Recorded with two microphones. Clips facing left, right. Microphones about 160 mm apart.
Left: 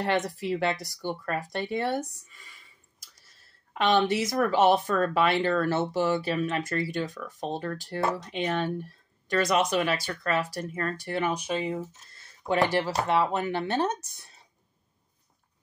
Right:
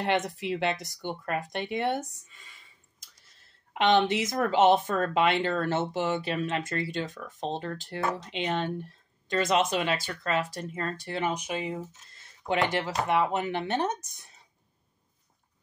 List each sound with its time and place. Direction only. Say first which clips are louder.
0.4 s speech: left 1 dB; 20° right (ahead or behind)
3.7 s speech: even; 20° right (ahead or behind)